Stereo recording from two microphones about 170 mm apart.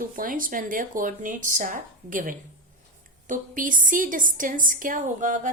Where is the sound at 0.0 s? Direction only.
55° right (ahead or behind).